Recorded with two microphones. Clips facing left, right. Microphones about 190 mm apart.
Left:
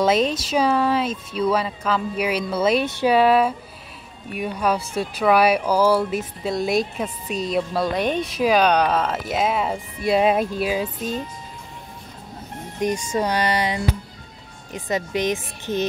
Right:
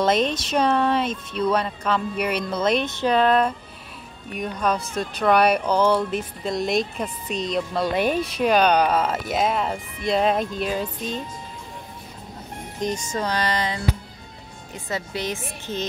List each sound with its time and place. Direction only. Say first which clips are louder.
0.0 s speech: left 2 dB; 5° left (ahead or behind)
12.8 s speech: left 4 dB; 15° left (ahead or behind)